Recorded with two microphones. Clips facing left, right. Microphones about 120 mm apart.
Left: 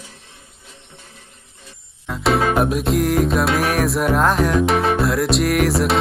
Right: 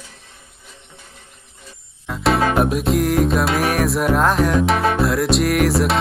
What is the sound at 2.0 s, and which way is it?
Music, centre (ahead or behind).